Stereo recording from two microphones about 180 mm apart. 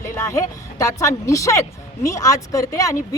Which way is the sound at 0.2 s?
15° left (ahead or behind).